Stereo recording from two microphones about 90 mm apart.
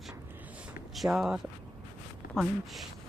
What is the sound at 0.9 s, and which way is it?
Speech, 5° right (ahead or behind).